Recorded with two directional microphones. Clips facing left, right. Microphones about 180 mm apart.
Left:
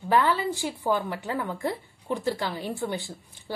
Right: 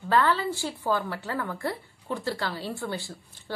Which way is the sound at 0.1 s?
15° left (ahead or behind).